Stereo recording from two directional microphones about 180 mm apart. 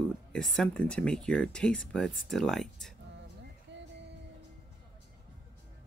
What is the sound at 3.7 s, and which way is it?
Music, 75° right (ahead or behind).